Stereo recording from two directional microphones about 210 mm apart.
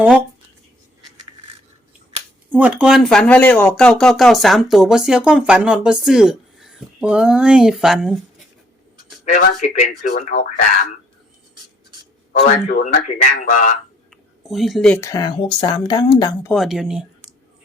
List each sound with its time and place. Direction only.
2.5 s speech: 5° right (ahead or behind)
9.2 s speech: 35° left (ahead or behind)
12.6 s speech: 35° left (ahead or behind)
14.4 s speech: centre (ahead or behind); by 16.5 s 20° left (ahead or behind)
16.5 s speech: centre (ahead or behind)